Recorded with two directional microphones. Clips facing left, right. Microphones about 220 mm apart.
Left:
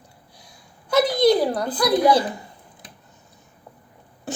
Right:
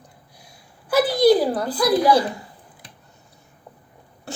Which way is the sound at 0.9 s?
5° right (ahead or behind).